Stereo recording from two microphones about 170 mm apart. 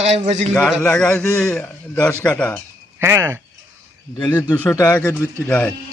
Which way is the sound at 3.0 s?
15° right (ahead or behind).